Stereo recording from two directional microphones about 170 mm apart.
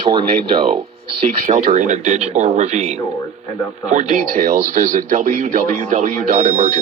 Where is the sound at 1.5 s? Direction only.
50° right (ahead or behind).